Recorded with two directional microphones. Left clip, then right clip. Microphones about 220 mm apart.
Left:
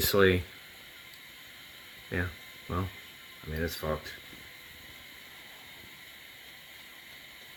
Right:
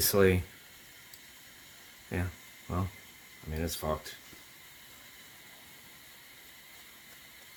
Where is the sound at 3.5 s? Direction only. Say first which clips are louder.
Left 1 dB; 35° right (ahead or behind).